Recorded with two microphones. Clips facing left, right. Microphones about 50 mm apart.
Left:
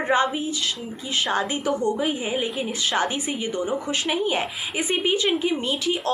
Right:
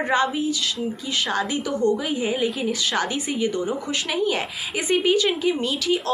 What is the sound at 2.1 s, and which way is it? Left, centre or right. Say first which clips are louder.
A woman's voice: right 2 dB; centre.